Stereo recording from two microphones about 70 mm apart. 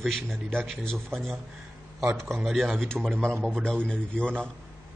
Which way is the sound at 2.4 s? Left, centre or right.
Centre.